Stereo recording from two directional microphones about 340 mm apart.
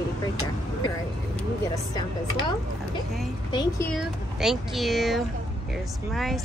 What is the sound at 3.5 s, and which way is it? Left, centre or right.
Speech, centre.